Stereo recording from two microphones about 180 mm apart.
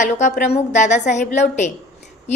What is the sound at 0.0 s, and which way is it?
A woman's voice, 40° left (ahead or behind).